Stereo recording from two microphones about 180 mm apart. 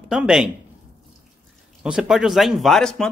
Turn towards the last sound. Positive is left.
turn(degrees=5)  # may be behind; listen again after turning